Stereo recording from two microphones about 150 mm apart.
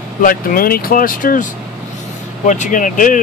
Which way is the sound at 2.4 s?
55° left (ahead or behind).